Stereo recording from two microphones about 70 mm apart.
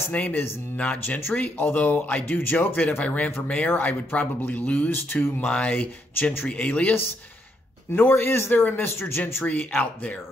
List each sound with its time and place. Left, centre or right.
0.1 s speech: left
5.5 s speech: left
7.9 s speech: left